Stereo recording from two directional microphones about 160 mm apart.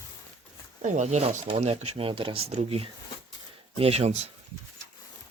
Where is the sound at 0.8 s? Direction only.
50° right (ahead or behind).